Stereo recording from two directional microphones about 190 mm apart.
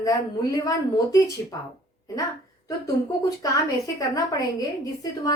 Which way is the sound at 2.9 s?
15° left (ahead or behind).